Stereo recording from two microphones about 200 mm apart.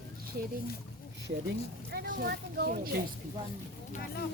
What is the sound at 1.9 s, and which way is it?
Speech, 50° right (ahead or behind).